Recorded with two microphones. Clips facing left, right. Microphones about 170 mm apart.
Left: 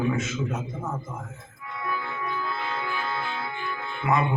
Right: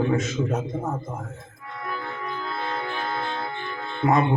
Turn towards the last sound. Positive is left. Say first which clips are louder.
# right 4 dB
turn(degrees=-40)  # may be behind; listen again after turning